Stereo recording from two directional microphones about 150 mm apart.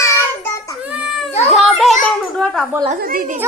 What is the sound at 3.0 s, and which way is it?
Speech, 75° right (ahead or behind).